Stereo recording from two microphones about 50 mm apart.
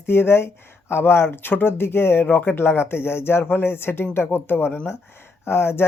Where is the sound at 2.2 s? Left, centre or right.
Left.